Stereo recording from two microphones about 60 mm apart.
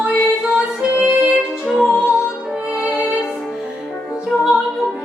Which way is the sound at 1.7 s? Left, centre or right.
Centre.